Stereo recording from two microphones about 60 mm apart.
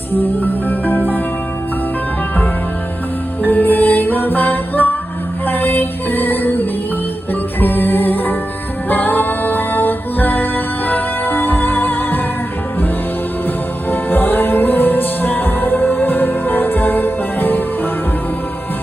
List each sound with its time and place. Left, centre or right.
0.7 s music: left
3.4 s music: left
13.9 s music: left